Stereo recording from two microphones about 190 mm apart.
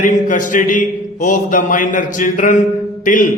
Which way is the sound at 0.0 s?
45° left (ahead or behind).